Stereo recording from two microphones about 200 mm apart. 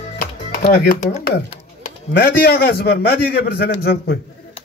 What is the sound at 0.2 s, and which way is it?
Music, 50° left (ahead or behind).